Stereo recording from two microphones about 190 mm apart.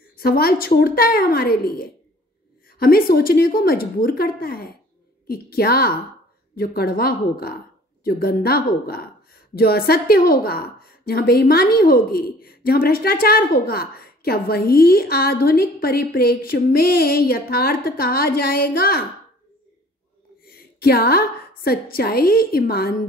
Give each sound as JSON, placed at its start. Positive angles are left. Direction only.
{"t": 0.2, "sound": "a woman's voice", "side_deg": 50}
{"t": 20.5, "sound": "a woman's voice", "side_deg": 55}